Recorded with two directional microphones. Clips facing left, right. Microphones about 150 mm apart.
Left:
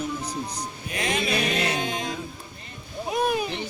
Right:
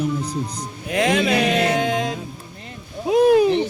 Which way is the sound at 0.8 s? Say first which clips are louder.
Right 9 dB; 90° right.